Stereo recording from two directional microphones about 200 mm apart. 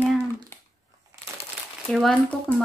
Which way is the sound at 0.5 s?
10° left (ahead or behind).